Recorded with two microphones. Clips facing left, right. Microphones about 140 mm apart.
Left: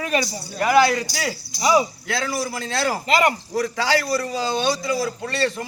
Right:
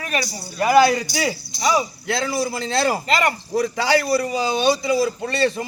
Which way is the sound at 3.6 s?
15° right (ahead or behind).